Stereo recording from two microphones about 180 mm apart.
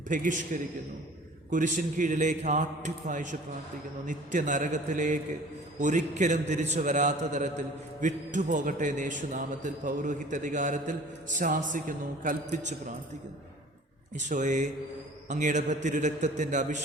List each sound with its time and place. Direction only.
0.1 s a man's voice: 45° right (ahead or behind)
1.5 s a man's voice: 45° right (ahead or behind)
14.2 s a man's voice: 45° right (ahead or behind)